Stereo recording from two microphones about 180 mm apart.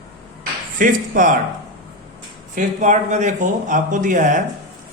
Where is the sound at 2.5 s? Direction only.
45° right (ahead or behind).